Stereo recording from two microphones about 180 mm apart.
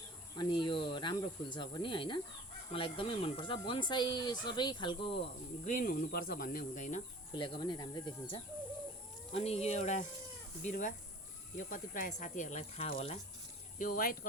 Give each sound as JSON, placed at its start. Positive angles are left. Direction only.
{"t": 0.3, "sound": "speech", "side_deg": 25}
{"t": 5.6, "sound": "speech", "side_deg": 50}
{"t": 7.3, "sound": "speech", "side_deg": 25}
{"t": 13.7, "sound": "speech", "side_deg": 50}